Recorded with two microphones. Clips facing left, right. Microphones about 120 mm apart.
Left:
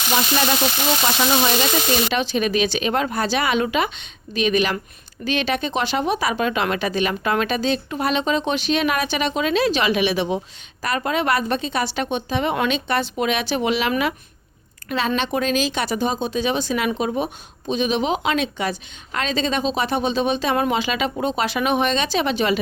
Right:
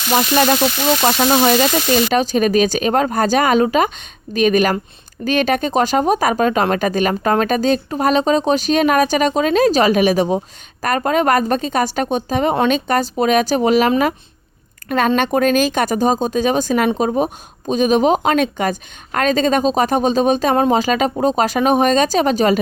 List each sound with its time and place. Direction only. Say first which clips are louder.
1.0 s speech: right 6 dB; 40° right (ahead or behind)